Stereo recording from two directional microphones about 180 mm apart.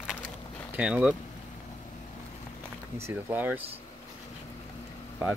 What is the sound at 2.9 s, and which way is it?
Speech, 10° right (ahead or behind).